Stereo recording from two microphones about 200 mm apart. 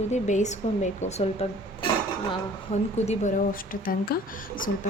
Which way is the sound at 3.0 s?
40° left (ahead or behind).